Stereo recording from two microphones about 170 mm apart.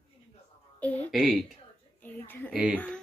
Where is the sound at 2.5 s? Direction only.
10° right (ahead or behind).